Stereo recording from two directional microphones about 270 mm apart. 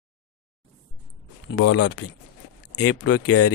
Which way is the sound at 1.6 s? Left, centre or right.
Left.